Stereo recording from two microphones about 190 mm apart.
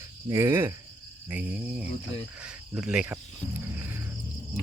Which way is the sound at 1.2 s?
10° right (ahead or behind).